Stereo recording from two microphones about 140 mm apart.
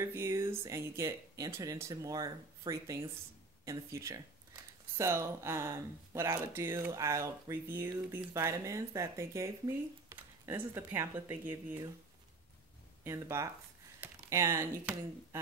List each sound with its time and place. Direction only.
0.0 s speech: 15° right (ahead or behind)
13.0 s speech: 20° right (ahead or behind)
14.0 s a sound: 20° right (ahead or behind)